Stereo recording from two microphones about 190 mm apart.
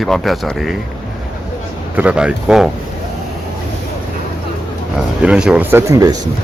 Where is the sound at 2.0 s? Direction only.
5° right (ahead or behind).